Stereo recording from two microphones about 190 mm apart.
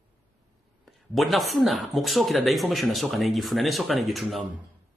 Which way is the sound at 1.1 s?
Centre (ahead or behind).